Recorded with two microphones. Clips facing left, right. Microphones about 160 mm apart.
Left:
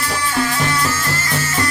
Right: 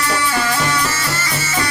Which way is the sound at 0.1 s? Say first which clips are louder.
Left 1 dB; 85° right.